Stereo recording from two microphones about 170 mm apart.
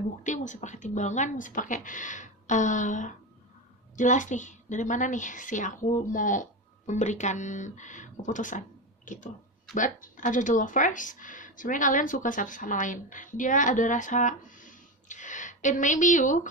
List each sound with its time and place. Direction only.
0.2 s speech: 45° left (ahead or behind)